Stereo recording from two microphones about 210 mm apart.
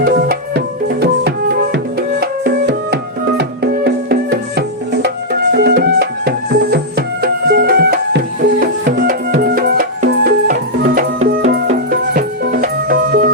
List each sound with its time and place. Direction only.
0.0 s music: 50° right (ahead or behind)